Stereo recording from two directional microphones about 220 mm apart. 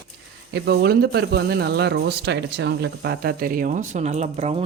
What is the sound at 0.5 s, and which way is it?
Speech, 50° right (ahead or behind).